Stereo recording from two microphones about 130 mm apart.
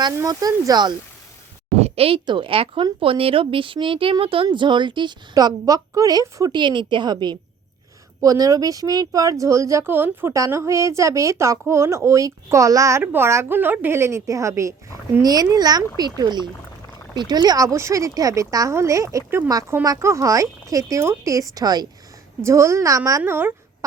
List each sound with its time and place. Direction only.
0.2 s speech: 25° right (ahead or behind)
1.8 s a woman's voice: 45° right (ahead or behind); by 6.5 s 25° right (ahead or behind)
6.5 s a woman's voice: 35° right (ahead or behind); by 23.6 s 15° right (ahead or behind)